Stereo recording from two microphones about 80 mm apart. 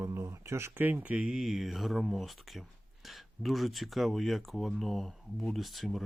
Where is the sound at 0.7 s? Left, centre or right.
Right.